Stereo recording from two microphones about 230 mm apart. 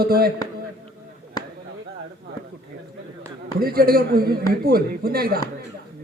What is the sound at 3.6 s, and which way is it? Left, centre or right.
A man's voice, right.